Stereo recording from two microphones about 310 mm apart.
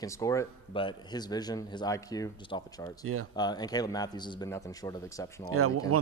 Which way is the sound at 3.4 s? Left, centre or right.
Centre.